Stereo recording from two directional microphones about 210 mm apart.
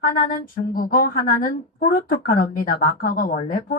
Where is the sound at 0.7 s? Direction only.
40° left (ahead or behind).